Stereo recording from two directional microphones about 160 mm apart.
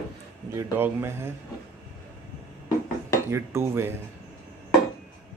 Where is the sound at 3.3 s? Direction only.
15° right (ahead or behind).